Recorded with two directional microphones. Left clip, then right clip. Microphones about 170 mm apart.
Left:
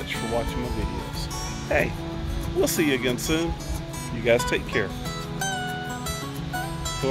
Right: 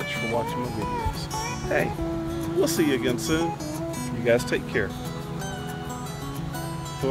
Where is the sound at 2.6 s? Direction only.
20° left (ahead or behind).